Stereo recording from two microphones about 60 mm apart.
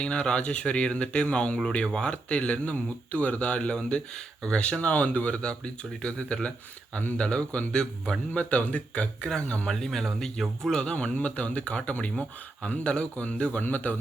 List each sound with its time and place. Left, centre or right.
0.0 s speech: centre